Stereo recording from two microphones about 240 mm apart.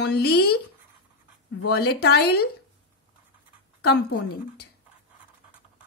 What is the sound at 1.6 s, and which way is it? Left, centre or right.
Speech, left.